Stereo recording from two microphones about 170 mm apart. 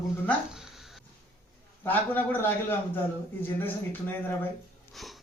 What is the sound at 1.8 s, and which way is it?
A man's voice, 10° left (ahead or behind).